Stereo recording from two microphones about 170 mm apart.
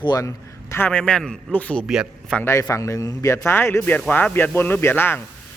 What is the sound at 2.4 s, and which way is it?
A man's voice, 15° left (ahead or behind).